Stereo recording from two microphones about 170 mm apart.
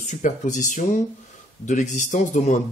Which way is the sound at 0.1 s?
45° left (ahead or behind).